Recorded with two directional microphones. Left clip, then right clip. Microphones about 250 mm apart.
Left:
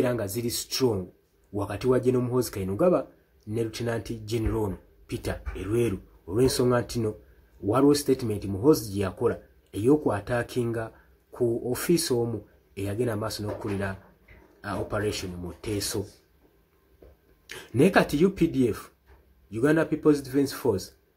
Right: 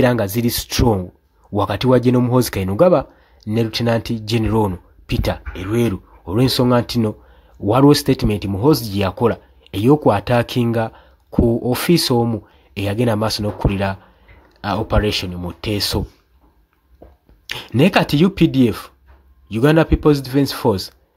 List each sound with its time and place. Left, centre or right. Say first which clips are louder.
0.0 s speech: right 11 dB; right
17.5 s speech: right 6 dB; right